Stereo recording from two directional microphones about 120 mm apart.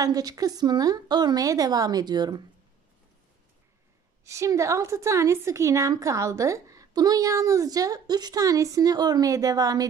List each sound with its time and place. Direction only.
0.0 s a woman's voice: 30° right (ahead or behind)
4.2 s a woman's voice: 25° right (ahead or behind)